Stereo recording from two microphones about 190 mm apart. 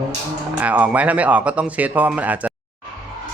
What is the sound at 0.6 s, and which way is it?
A man's voice, 10° right (ahead or behind).